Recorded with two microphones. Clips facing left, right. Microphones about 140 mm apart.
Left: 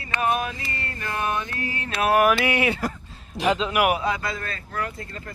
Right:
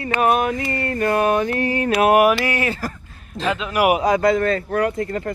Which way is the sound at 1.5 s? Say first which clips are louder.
Right 11 dB; 25° right (ahead or behind).